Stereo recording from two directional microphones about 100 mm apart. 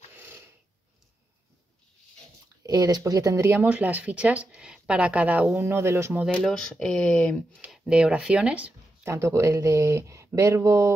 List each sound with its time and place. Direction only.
0.1 s a sound: 20° right (ahead or behind)
2.6 s speech: 40° right (ahead or behind)
3.7 s speech: 15° right (ahead or behind)
6.3 s speech: 10° left (ahead or behind)
7.8 s speech: 10° right (ahead or behind)
9.0 s speech: 30° right (ahead or behind)